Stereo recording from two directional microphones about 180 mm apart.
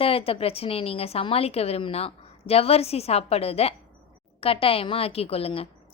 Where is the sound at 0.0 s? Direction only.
30° left (ahead or behind).